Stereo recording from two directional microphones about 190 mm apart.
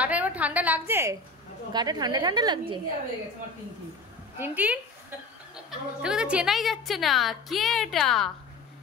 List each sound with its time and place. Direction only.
0.0 s a woman's voice: 10° right (ahead or behind); by 2.8 s 25° right (ahead or behind)
4.4 s a woman's voice: 10° right (ahead or behind)